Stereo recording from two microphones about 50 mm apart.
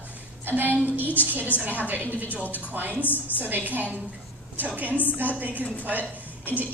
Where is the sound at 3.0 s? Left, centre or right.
Left.